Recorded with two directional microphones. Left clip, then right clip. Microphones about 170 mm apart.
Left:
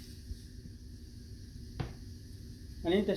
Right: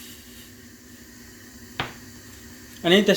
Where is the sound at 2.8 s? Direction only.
55° right (ahead or behind).